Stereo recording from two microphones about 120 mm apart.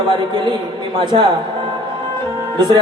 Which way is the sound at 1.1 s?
45° right (ahead or behind).